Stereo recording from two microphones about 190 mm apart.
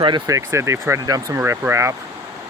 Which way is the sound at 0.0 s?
20° right (ahead or behind).